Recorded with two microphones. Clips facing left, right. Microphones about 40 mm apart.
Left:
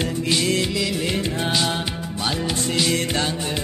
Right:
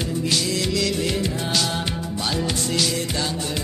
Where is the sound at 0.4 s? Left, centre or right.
Left.